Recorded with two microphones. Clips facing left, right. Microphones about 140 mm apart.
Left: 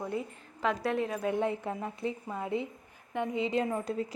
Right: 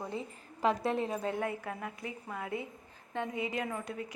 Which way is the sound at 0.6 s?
30° right (ahead or behind).